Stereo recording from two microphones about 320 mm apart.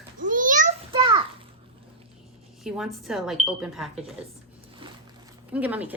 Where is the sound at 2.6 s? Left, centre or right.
Centre.